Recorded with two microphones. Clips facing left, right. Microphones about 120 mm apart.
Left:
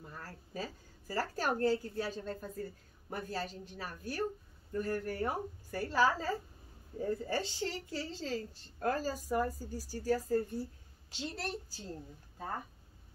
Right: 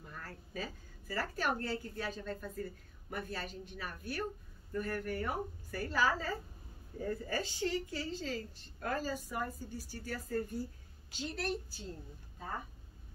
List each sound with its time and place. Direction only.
0.1 s a woman's voice: 30° left (ahead or behind)